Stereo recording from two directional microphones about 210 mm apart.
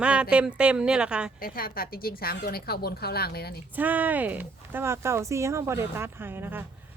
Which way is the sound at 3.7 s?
10° right (ahead or behind).